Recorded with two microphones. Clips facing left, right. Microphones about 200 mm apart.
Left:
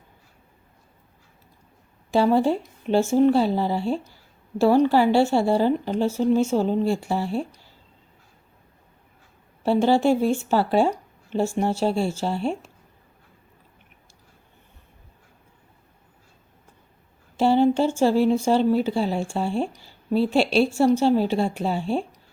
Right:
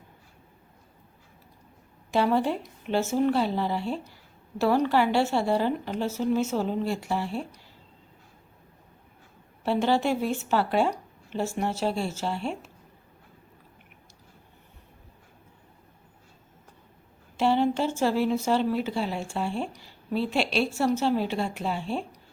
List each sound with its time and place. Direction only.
2.1 s a woman's voice: 30° left (ahead or behind)
9.6 s a woman's voice: 30° left (ahead or behind)
12.4 s speech: centre (ahead or behind)
17.3 s a woman's voice: 30° left (ahead or behind)